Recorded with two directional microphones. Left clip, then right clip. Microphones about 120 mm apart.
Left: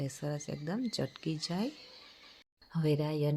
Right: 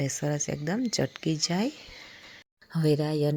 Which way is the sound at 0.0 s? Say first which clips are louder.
Right 9 dB; 45° right (ahead or behind).